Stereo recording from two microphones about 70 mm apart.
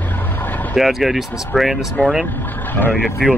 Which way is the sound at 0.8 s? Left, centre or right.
Centre.